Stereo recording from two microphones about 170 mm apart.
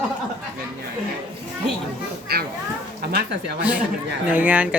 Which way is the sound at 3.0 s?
70° right (ahead or behind).